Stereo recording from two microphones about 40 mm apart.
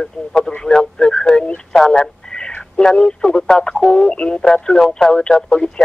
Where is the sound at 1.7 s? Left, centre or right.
Centre.